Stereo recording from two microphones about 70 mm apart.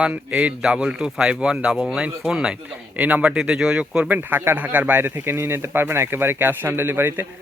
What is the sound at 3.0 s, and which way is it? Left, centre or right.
Speech, right.